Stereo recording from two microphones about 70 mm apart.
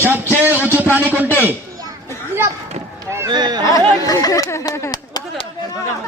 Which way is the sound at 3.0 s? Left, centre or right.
Right.